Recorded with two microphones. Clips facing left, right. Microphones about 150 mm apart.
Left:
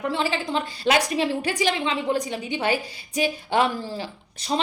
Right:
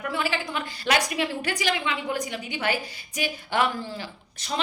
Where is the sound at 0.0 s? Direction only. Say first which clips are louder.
Left 3 dB; 25° left (ahead or behind).